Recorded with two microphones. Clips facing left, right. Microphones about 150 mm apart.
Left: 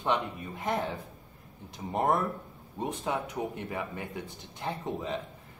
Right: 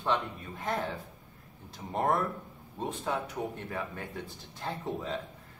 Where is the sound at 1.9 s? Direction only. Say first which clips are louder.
Left 1 dB; 15° left (ahead or behind).